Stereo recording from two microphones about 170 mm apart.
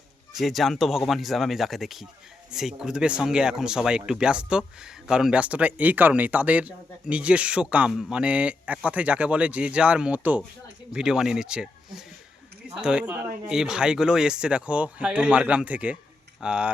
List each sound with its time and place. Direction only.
0.3 s speech: centre (ahead or behind)